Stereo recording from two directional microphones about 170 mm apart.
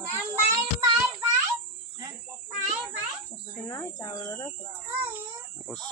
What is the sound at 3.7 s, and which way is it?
Speech, 20° left (ahead or behind).